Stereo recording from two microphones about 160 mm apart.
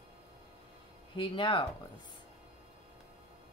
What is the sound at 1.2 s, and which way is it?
Speech, 30° left (ahead or behind).